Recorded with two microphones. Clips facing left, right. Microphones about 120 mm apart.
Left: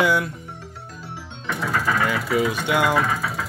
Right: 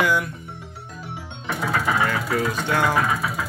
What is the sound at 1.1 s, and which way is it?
Music, 15° right (ahead or behind).